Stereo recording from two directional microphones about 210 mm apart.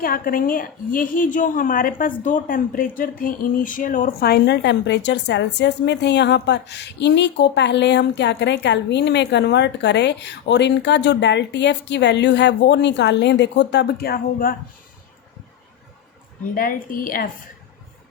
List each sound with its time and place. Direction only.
0.0 s a woman's voice: 45° left (ahead or behind)
16.6 s a woman's voice: 40° left (ahead or behind)